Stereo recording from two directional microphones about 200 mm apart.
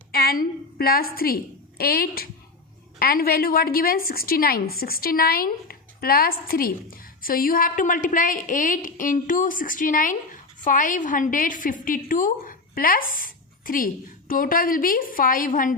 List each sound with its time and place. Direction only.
0.1 s a woman's voice: 50° left (ahead or behind)